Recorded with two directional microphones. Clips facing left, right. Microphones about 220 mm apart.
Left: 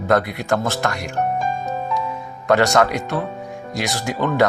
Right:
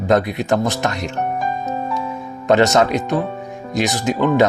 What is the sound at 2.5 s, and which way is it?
Speech, 20° right (ahead or behind).